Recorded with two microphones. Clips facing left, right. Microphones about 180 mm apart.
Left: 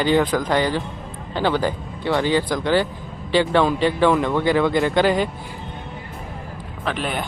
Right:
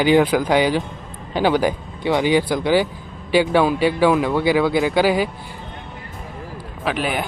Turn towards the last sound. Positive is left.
turn(degrees=-5)  # may be behind; listen again after turning